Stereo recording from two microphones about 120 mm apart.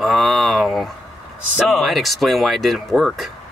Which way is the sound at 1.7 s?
Centre (ahead or behind).